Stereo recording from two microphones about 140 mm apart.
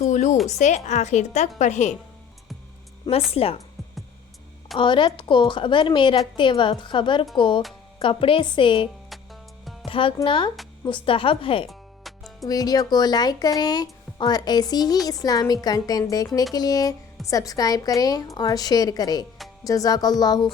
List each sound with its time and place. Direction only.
0.0 s a sound: 60° left (ahead or behind)
0.4 s speech: 55° left (ahead or behind)
3.3 s speech: 45° left (ahead or behind)
4.8 s a woman's voice: 35° left (ahead or behind)
9.0 s music: centre (ahead or behind)
9.8 s a woman's voice: 40° left (ahead or behind)
11.7 s music: centre (ahead or behind)
12.5 s speech: 25° left (ahead or behind)